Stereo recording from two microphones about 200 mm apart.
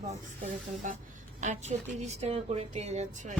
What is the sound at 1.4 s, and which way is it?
Speech, 35° right (ahead or behind).